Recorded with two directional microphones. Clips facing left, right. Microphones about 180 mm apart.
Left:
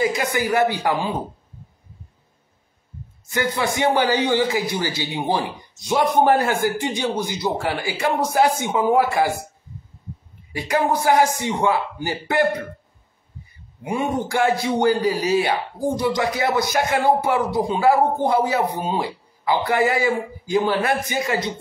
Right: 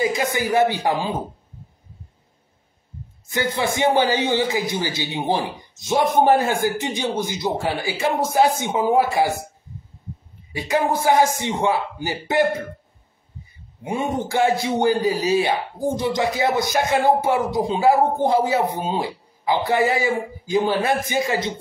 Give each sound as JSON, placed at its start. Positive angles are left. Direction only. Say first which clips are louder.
{"t": 0.0, "sound": "a man's voice", "louder": "even", "side_deg": -25}
{"t": 3.3, "sound": "a man's voice", "louder": "even", "side_deg": -25}
{"t": 10.5, "sound": "a man's voice", "louder": "even", "side_deg": -25}
{"t": 13.8, "sound": "a man's voice", "louder": "left 1 dB", "side_deg": -25}